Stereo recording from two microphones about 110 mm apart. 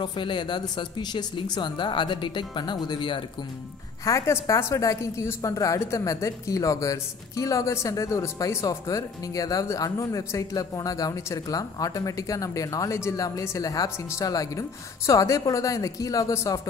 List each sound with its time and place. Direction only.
0.0 s speech: 45° left (ahead or behind)
4.0 s a woman's voice: 30° left (ahead or behind)